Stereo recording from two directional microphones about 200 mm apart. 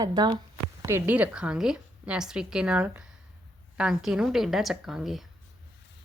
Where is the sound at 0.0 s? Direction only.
20° right (ahead or behind); by 5.3 s centre (ahead or behind).